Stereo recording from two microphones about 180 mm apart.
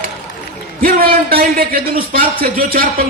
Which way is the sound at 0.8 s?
55° right (ahead or behind).